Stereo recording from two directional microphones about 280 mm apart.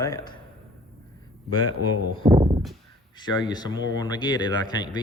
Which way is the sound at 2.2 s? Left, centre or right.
Centre.